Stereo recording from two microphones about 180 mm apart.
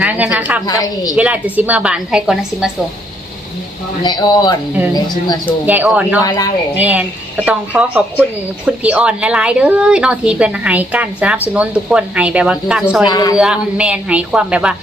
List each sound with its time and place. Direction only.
0.0 s a woman's voice: 10° right (ahead or behind)
0.7 s speech: 20° left (ahead or behind)
1.1 s a woman's voice: 10° right (ahead or behind)
4.0 s speech: 25° left (ahead or behind)
5.6 s a woman's voice: 10° right (ahead or behind)
6.1 s speech: 20° left (ahead or behind)
6.7 s a woman's voice: 10° right (ahead or behind)
13.1 s speech: 20° left (ahead or behind)
13.3 s a woman's voice: 5° right (ahead or behind)